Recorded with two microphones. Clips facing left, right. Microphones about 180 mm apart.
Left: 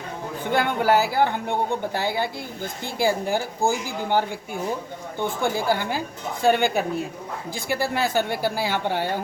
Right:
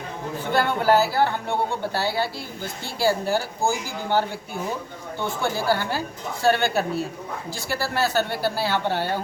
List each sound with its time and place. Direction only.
0.5 s a woman's voice: 15° left (ahead or behind)